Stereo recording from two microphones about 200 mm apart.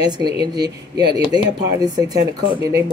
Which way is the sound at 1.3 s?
20° right (ahead or behind).